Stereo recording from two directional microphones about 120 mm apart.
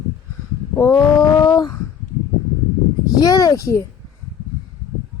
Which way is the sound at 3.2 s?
30° left (ahead or behind).